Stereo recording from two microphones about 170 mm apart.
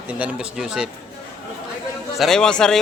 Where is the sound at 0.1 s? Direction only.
10° right (ahead or behind).